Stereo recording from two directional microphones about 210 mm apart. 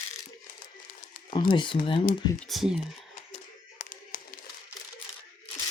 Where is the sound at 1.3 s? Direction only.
20° left (ahead or behind).